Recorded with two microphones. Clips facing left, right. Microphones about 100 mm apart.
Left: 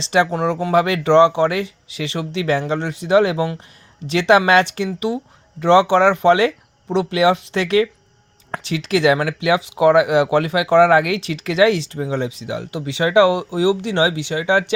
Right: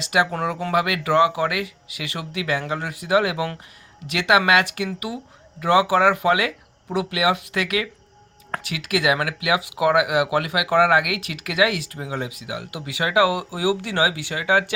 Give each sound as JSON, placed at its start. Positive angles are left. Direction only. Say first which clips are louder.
{"t": 0.0, "sound": "speech", "louder": "left 4 dB", "side_deg": 30}